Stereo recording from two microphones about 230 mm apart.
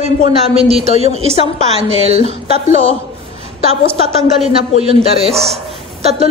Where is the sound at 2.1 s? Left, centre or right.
Right.